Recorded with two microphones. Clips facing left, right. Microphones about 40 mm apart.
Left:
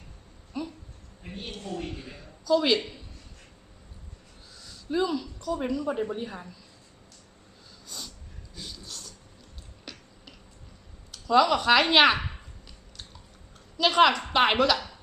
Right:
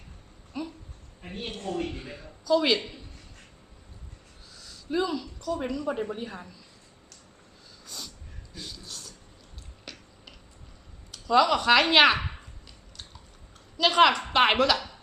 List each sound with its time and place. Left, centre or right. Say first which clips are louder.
0.5 s a sound: left 1 dB; centre
1.2 s a woman's voice: right 3 dB; right
2.0 s a sound: right 2 dB; centre
4.6 s a woman's voice: left 1 dB; centre
7.9 s snort: even; centre
8.5 s a sound: even; centre
9.8 s finger snapping: even; centre
11.1 s speech: even; centre
13.7 s a woman's voice: even; centre